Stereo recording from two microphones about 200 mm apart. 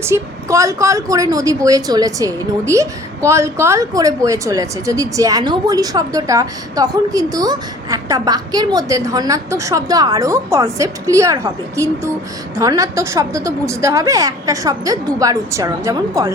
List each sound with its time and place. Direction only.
0.0 s a woman's voice: 15° right (ahead or behind)
12.5 s a woman's voice: 15° right (ahead or behind)